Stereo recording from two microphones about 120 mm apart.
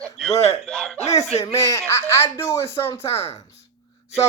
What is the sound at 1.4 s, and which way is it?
Speech, 30° left (ahead or behind).